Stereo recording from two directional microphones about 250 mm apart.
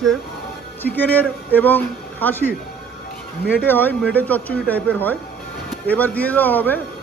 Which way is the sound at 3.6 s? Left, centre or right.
Centre.